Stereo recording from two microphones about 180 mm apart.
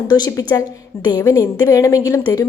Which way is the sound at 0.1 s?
20° left (ahead or behind).